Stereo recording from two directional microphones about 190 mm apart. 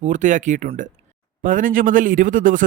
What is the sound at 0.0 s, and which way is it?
Speech, 40° right (ahead or behind).